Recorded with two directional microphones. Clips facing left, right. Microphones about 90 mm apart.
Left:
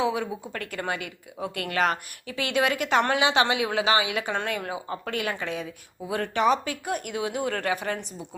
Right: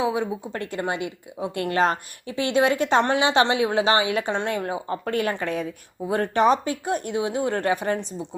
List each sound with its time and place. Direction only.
0.0 s a woman's voice: 25° right (ahead or behind)